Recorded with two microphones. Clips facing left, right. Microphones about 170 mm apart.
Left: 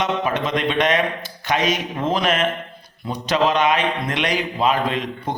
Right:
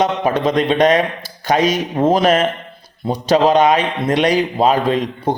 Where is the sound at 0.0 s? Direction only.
35° right (ahead or behind).